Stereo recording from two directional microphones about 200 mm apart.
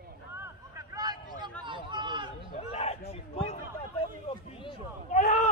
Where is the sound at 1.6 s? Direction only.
25° right (ahead or behind).